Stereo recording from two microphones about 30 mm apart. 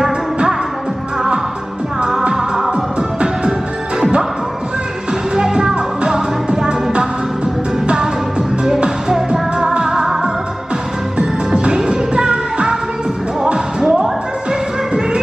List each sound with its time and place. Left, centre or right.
2.3 s music: centre
2.7 s music: right
5.3 s music: right
11.1 s music: right
13.7 s music: centre